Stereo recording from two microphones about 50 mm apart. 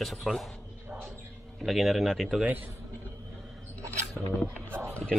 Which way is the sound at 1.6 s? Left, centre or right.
Centre.